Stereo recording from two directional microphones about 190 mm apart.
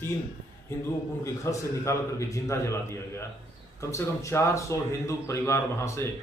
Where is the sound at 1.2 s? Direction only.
15° left (ahead or behind).